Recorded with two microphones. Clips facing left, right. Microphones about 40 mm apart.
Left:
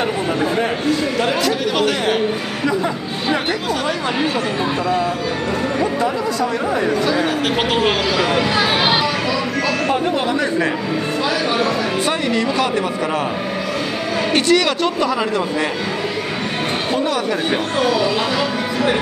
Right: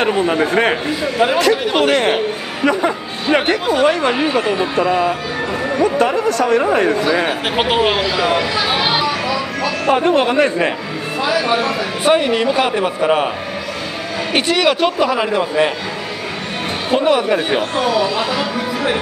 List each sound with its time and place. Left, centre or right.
1.1 s speech: centre
1.7 s speech: right
3.3 s speech: right
4.1 s speech: centre
5.9 s speech: right
7.2 s speech: centre
9.8 s speech: right
11.2 s speech: centre
12.0 s speech: right
14.3 s speech: centre
16.9 s speech: right
17.5 s speech: centre